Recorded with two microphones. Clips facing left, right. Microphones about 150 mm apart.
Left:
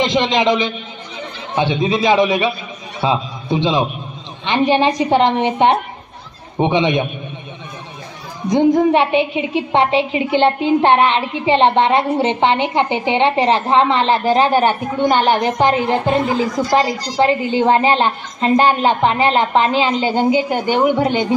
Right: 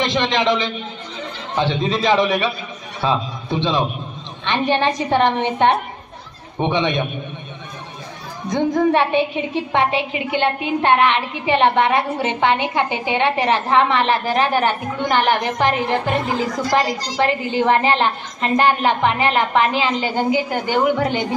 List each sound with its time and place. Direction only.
0.0 s a woman's voice: 15° left (ahead or behind)
8.5 s a woman's voice: 15° left (ahead or behind)